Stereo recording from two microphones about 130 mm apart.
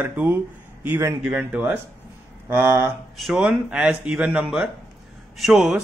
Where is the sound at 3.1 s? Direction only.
Centre (ahead or behind).